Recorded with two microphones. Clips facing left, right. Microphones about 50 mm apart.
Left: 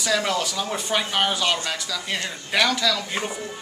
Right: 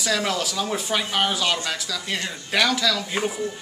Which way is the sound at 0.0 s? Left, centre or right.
Centre.